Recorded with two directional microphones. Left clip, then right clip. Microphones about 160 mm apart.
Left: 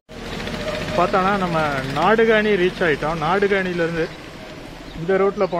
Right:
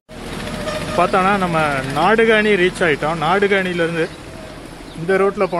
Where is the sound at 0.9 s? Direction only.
15° right (ahead or behind).